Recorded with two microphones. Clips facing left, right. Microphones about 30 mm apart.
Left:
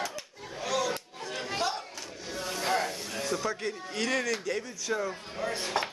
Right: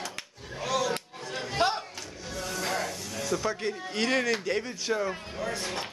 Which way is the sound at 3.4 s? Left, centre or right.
Centre.